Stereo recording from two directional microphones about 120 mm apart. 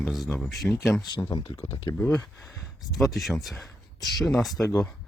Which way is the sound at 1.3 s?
50° left (ahead or behind).